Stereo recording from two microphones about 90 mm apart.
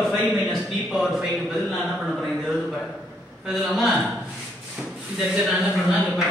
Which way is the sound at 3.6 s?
Centre (ahead or behind).